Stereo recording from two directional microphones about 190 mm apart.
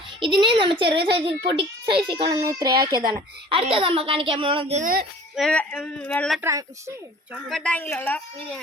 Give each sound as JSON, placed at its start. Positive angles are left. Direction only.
{"t": 0.2, "sound": "a child's voice", "side_deg": -25}
{"t": 4.8, "sound": "speech", "side_deg": -45}
{"t": 5.4, "sound": "speech", "side_deg": 5}
{"t": 6.4, "sound": "a woman's voice", "side_deg": -15}
{"t": 7.5, "sound": "a woman's voice", "side_deg": 5}